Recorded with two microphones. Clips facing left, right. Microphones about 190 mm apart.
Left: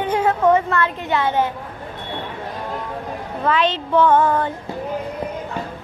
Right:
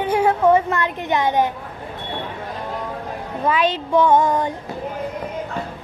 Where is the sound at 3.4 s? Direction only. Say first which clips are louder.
Even; 10° right (ahead or behind).